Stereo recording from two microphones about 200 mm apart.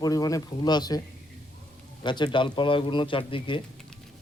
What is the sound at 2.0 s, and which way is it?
A man's voice, 25° left (ahead or behind).